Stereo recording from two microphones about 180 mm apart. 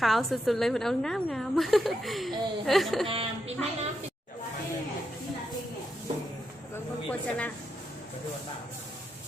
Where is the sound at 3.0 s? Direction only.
30° right (ahead or behind).